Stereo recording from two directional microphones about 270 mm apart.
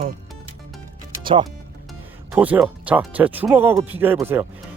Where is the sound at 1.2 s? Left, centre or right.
Centre.